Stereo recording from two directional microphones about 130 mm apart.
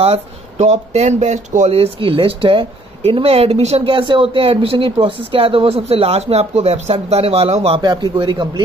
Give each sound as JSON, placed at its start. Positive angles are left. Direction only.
{"t": 0.0, "sound": "speech", "side_deg": -55}
{"t": 7.8, "sound": "a man's voice", "side_deg": -35}